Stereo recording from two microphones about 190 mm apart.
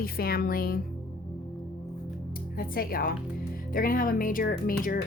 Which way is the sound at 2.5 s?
50° left (ahead or behind).